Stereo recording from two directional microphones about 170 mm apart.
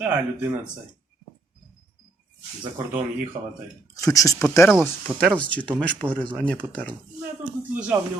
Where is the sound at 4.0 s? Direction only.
20° left (ahead or behind).